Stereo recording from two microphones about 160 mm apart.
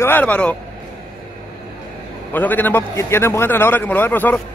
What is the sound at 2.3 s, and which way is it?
A man's voice, 10° left (ahead or behind).